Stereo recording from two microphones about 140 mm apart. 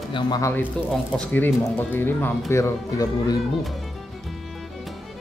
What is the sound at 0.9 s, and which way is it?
Speech, 5° left (ahead or behind).